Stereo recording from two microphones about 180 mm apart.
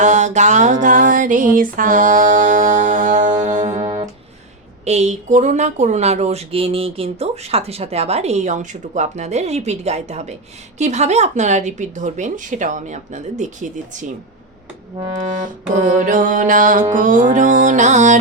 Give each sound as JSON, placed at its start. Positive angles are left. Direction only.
{"t": 0.0, "sound": "music", "side_deg": -40}
{"t": 4.9, "sound": "speech", "side_deg": -40}
{"t": 15.3, "sound": "music", "side_deg": -45}